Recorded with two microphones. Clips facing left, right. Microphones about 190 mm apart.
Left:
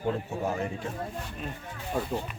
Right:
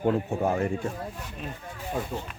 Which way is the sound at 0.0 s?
55° right (ahead or behind).